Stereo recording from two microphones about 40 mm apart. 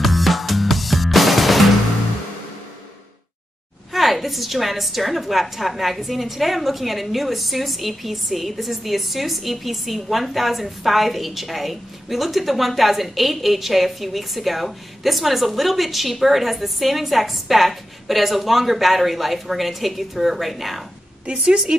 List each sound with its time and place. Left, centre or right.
0.0 s music: centre
3.9 s a woman's voice: centre
21.3 s a woman's voice: right